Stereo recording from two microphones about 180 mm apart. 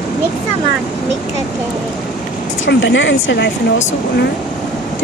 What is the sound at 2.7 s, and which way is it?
Speech, 80° left.